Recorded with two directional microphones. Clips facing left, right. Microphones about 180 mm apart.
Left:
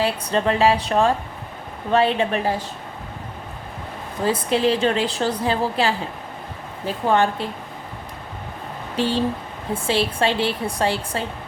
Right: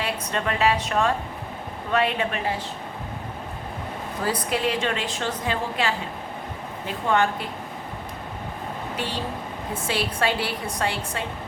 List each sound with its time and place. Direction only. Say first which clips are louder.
0.0 s a woman's voice: left 6 dB; 30° left (ahead or behind)
4.2 s a woman's voice: left 6 dB; 25° left (ahead or behind)
9.0 s a woman's voice: left 11 dB; 30° left (ahead or behind)